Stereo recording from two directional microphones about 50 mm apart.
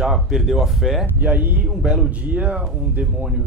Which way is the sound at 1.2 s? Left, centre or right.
Right.